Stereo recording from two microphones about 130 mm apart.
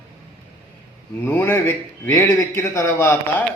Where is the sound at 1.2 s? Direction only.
15° left (ahead or behind).